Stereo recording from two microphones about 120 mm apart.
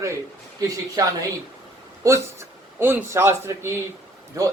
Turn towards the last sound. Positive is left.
turn(degrees=-25)  # may be behind; listen again after turning